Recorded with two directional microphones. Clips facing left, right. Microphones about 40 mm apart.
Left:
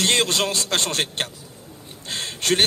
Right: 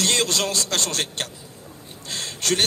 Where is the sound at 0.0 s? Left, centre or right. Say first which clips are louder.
Left 2 dB; left.